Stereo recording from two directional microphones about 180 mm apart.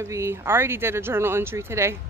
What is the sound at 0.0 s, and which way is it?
Speech, 15° right (ahead or behind).